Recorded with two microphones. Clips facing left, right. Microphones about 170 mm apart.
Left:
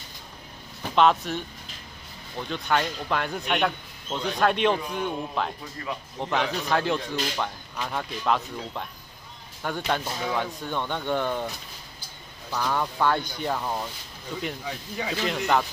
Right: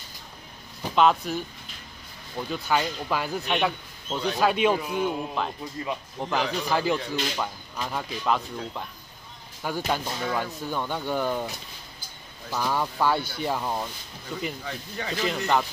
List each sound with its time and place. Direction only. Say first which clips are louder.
0.9 s a man's voice: even; centre (ahead or behind)
5.8 s speech: right 2 dB; 20° right (ahead or behind)
6.2 s a man's voice: even; centre (ahead or behind)
14.6 s a man's voice: left 2 dB; 10° left (ahead or behind)